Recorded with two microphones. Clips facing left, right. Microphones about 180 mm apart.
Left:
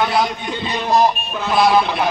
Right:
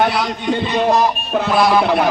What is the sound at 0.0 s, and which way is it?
Speech, 65° right (ahead or behind).